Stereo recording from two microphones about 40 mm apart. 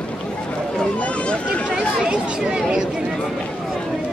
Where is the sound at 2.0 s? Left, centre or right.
Right.